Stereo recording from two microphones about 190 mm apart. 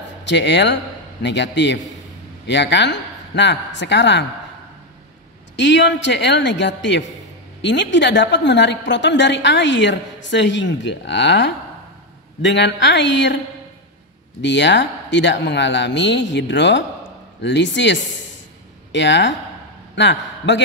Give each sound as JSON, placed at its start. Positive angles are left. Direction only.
{"t": 0.3, "sound": "a woman's voice", "side_deg": 70}
{"t": 5.6, "sound": "a woman's voice", "side_deg": 70}
{"t": 14.4, "sound": "a woman's voice", "side_deg": 70}